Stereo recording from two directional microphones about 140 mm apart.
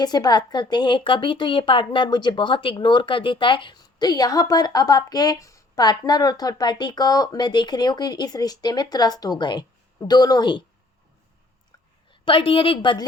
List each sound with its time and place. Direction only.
0.0 s a woman's voice: 30° left (ahead or behind)
12.2 s a woman's voice: 40° left (ahead or behind)